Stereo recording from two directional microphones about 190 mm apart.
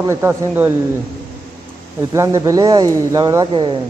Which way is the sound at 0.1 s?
15° right (ahead or behind).